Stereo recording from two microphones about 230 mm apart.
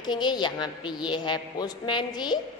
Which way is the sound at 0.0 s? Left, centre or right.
Centre.